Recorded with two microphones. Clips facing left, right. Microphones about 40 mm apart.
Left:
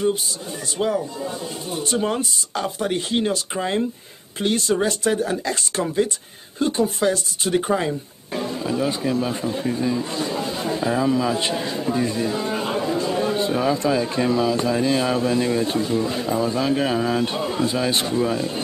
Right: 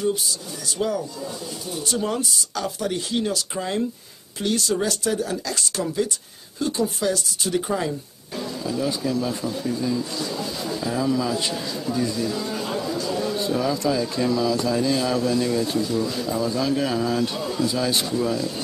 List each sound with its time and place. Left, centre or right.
0.7 s speech: left